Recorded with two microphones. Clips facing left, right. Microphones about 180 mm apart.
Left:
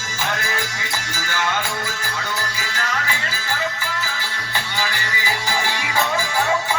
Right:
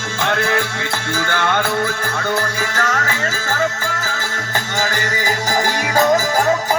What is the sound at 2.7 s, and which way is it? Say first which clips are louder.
Music: right 3 dB; 45° right (ahead or behind).